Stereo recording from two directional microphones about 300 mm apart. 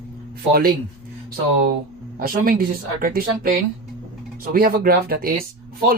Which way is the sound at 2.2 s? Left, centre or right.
Right.